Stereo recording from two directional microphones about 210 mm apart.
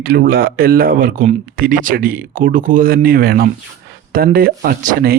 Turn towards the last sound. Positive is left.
turn(degrees=-45)  # may be behind; listen again after turning